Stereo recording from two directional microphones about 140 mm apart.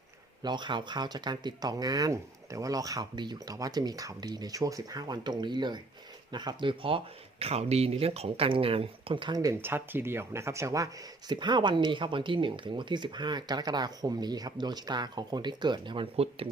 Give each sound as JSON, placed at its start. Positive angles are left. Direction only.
{"t": 0.4, "sound": "speech", "side_deg": -35}